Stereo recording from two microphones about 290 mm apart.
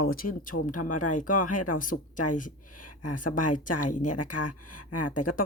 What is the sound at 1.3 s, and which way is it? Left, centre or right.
Speech, left.